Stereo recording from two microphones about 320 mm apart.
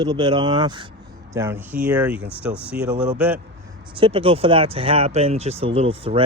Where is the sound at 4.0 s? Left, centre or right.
Centre.